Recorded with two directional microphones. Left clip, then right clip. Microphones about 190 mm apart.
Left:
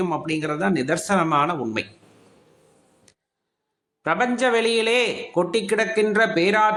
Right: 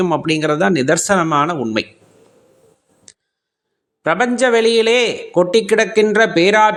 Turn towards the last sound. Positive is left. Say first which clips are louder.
# right 7 dB
turn(degrees=-35)  # may be behind; listen again after turning